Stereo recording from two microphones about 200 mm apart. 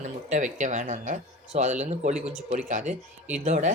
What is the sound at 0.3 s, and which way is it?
Speech, 35° right (ahead or behind).